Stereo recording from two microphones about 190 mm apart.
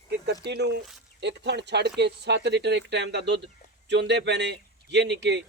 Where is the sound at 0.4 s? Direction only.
60° right (ahead or behind).